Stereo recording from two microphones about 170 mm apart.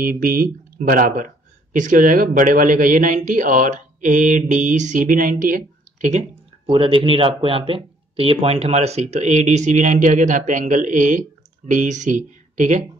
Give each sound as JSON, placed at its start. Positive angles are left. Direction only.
{"t": 0.0, "sound": "speech", "side_deg": -55}